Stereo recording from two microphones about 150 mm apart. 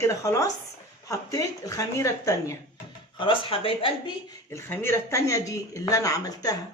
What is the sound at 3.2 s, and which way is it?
Speech, 35° left (ahead or behind).